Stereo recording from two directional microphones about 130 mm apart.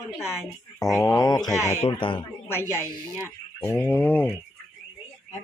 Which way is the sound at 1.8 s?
40° left (ahead or behind).